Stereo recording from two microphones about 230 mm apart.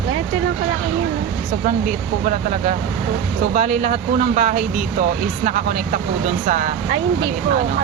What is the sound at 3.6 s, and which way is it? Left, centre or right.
Speech, right.